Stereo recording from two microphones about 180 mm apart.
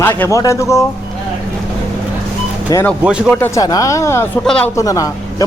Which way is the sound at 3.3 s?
15° left (ahead or behind).